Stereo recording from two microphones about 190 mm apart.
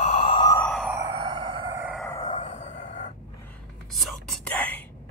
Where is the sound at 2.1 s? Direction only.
15° left (ahead or behind).